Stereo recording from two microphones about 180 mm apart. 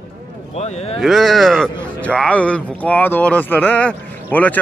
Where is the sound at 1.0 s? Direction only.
Centre (ahead or behind).